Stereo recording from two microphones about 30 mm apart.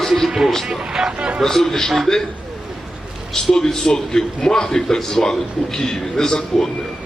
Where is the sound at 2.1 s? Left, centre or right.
Left.